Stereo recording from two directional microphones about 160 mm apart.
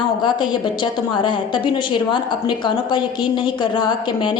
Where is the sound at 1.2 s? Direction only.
30° left (ahead or behind).